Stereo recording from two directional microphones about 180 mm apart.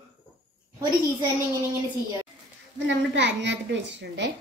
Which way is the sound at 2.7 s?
75° right (ahead or behind).